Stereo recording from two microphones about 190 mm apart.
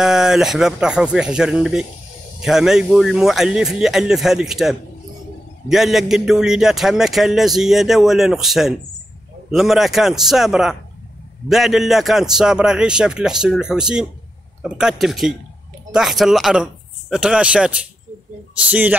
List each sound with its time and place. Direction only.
0.0 s a man's voice: 5° right (ahead or behind)